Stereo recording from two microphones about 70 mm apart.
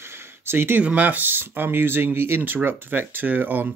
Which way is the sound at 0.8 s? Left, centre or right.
Right.